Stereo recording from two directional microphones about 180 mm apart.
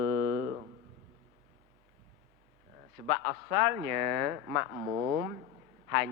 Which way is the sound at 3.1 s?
15° right (ahead or behind).